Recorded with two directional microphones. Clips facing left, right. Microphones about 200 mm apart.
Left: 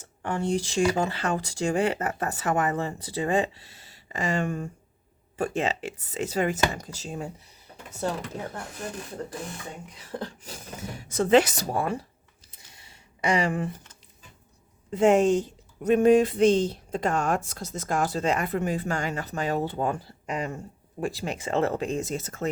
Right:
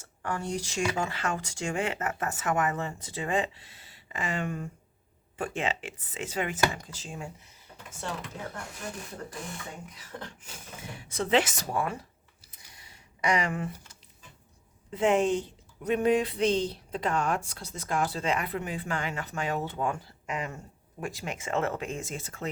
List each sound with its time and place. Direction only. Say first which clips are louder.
0.0 s speech: left 5 dB; 25° left (ahead or behind)
10.0 s speech: left 7 dB; 35° left (ahead or behind)
12.5 s a sound: left 1 dB; 25° left (ahead or behind)
14.9 s speech: left 5 dB; 45° left (ahead or behind)